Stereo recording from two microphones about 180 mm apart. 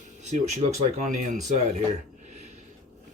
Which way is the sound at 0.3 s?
35° right (ahead or behind).